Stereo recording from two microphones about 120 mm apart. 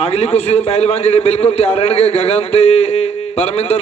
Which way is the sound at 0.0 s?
60° left (ahead or behind).